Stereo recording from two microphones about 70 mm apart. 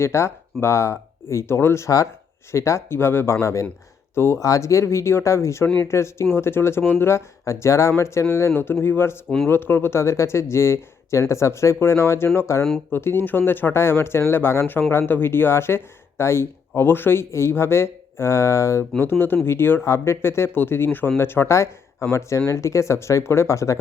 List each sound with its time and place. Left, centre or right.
0.0 s speech: left
3.4 s speech: left
4.4 s speech: left